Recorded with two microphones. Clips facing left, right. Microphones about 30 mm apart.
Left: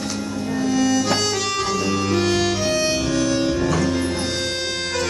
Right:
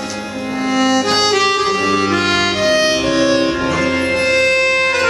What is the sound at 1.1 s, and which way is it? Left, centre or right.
Music, right.